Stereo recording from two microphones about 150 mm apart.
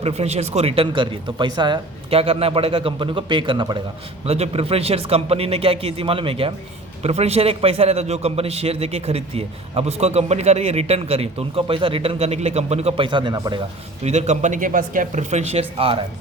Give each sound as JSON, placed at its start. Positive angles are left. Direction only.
{"t": 0.0, "sound": "a man's voice", "side_deg": -45}
{"t": 14.0, "sound": "a man's voice", "side_deg": -50}